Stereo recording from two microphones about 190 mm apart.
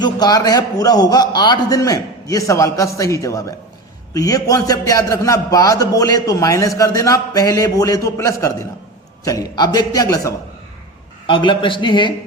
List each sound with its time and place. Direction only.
0.0 s a man's voice: 20° left (ahead or behind)